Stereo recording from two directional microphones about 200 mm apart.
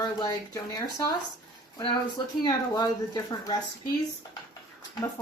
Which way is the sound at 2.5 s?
20° left (ahead or behind).